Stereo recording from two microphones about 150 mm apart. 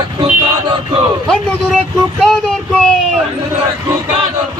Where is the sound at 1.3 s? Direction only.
5° left (ahead or behind).